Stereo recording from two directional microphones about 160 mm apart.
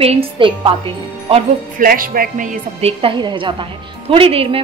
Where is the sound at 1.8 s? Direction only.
60° right (ahead or behind).